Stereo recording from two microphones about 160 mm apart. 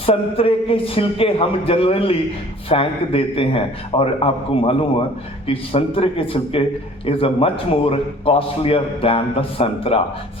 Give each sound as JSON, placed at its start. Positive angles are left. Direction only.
{"t": 0.0, "sound": "a man's voice", "side_deg": 35}